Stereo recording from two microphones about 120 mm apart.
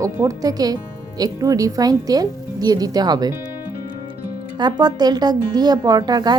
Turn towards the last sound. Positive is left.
turn(degrees=-35)  # may be behind; listen again after turning